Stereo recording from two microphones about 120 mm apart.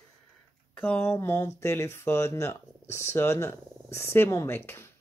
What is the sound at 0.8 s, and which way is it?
Speech, 20° left (ahead or behind).